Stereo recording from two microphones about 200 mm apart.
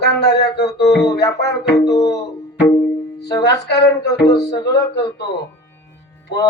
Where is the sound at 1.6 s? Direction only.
55° left (ahead or behind).